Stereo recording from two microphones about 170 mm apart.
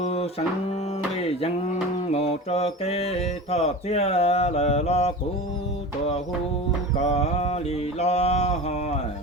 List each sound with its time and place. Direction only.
0.0 s a sound: 35° left (ahead or behind)
1.1 s mantra: 35° left (ahead or behind)
7.0 s mantra: 40° left (ahead or behind)